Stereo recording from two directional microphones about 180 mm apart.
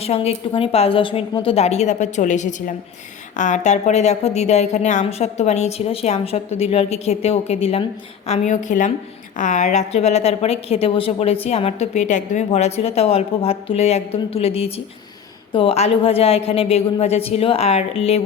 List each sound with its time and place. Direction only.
0.0 s a woman's voice: 35° left (ahead or behind)
8.3 s a woman's voice: 45° left (ahead or behind)